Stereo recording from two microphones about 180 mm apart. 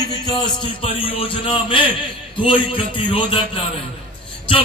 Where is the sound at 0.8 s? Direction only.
30° left (ahead or behind).